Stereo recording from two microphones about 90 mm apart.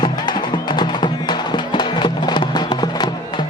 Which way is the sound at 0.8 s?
55° left (ahead or behind).